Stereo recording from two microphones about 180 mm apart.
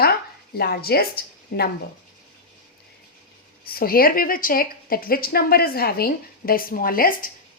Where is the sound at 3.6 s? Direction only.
55° left (ahead or behind).